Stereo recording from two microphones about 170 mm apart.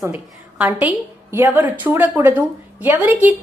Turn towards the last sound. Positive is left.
turn(degrees=-10)  # may be behind; listen again after turning